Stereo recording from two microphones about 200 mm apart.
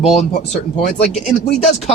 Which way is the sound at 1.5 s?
30° left (ahead or behind).